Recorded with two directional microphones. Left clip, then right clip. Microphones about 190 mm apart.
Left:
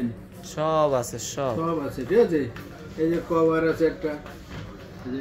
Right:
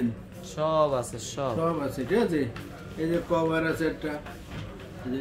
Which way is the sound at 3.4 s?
15° right (ahead or behind).